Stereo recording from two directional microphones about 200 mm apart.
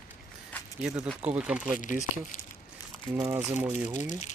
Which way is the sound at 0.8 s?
5° right (ahead or behind).